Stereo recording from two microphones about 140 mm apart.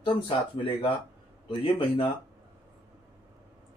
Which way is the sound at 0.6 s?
40° left (ahead or behind).